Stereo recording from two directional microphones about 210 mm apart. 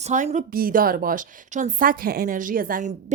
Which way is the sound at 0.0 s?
35° right (ahead or behind).